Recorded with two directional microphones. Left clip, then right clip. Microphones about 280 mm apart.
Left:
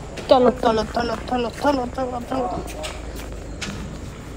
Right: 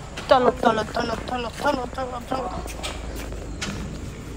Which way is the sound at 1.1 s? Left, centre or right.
Right.